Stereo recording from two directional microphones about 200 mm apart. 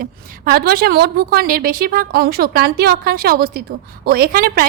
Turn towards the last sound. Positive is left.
turn(degrees=-50)  # may be behind; listen again after turning